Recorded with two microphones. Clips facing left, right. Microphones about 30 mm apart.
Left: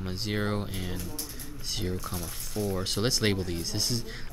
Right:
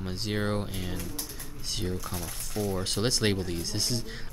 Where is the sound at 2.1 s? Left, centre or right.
Right.